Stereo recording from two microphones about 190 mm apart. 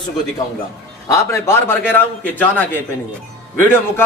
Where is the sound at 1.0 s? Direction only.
15° left (ahead or behind).